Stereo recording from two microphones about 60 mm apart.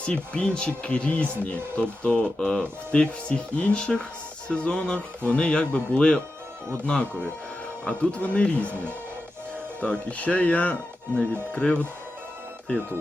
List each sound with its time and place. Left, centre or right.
0.0 s speech: centre
9.8 s speech: left